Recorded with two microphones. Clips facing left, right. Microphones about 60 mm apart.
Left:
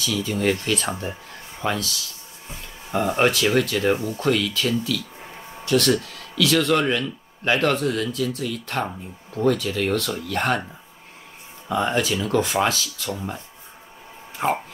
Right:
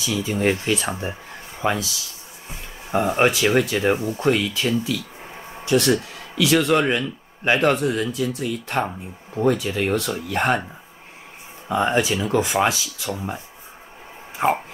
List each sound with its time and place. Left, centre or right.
0.0 s speech: centre
2.9 s speech: centre
11.7 s speech: centre
14.3 s a sound: centre